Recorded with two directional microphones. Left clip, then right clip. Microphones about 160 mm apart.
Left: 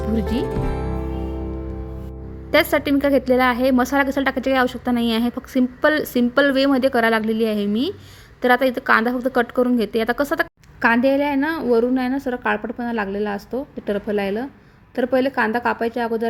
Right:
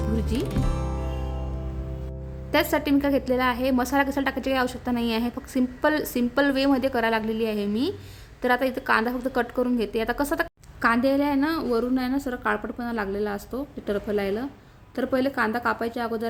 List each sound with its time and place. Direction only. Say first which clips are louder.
0.1 s speech: left 7 dB; 20° left (ahead or behind)
2.5 s a woman's voice: left 5 dB; 20° left (ahead or behind)